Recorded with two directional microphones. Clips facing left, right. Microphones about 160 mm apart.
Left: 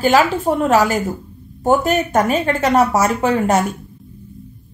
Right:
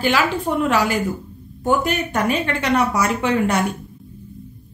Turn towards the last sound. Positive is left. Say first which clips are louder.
# left 3 dB
turn(degrees=40)  # may be behind; listen again after turning